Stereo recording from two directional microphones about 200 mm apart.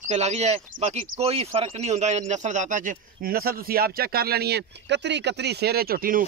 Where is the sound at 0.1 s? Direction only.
35° right (ahead or behind).